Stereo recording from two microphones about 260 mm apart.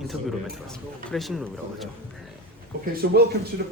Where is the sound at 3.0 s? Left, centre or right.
Right.